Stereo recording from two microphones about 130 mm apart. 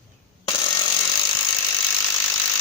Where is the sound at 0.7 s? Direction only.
35° left (ahead or behind).